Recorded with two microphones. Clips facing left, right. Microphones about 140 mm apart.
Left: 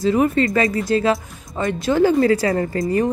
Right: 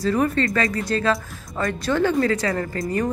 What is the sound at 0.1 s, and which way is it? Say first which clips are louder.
Speech: left 4 dB; 20° left (ahead or behind).